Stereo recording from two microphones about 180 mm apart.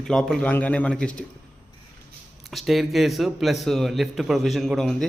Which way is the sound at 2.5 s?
Centre (ahead or behind).